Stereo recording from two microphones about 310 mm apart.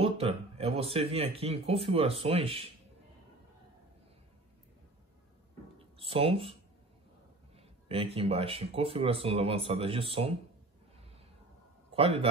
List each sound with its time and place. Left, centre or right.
0.0 s speech: centre
5.9 s speech: centre
7.5 s speech: centre
11.9 s a man's voice: centre